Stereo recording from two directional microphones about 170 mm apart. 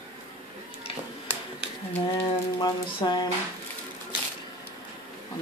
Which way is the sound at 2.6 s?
25° left (ahead or behind).